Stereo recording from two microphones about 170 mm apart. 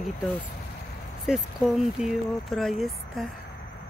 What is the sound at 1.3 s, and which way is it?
Speech, 5° right (ahead or behind).